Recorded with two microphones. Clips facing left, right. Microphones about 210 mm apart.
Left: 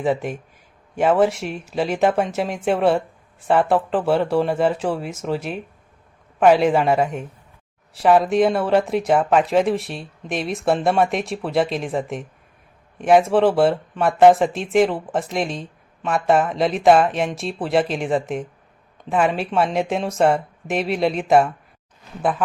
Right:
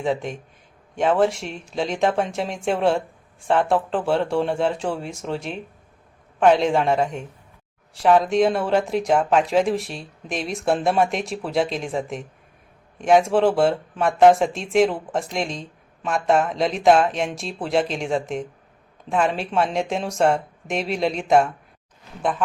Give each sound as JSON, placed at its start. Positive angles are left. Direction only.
{"t": 0.0, "sound": "speech", "side_deg": 5}